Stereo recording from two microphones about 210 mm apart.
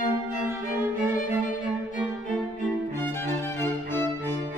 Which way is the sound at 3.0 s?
10° left (ahead or behind).